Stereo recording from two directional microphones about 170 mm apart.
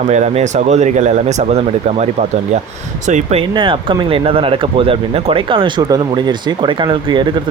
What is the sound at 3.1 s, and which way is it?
Speech, 45° right (ahead or behind).